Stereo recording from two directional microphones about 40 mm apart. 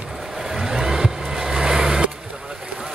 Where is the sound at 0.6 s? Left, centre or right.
Centre.